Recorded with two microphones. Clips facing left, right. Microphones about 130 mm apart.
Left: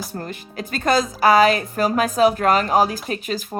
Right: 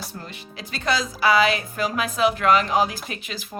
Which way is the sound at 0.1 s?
45° left (ahead or behind).